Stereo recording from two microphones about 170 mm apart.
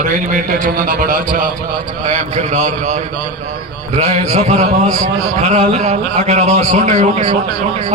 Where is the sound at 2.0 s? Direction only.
40° right (ahead or behind).